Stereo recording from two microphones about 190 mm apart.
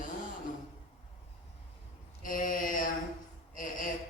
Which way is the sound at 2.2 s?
45° left (ahead or behind).